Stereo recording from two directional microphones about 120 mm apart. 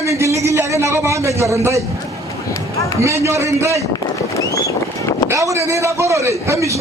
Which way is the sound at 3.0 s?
25° right (ahead or behind).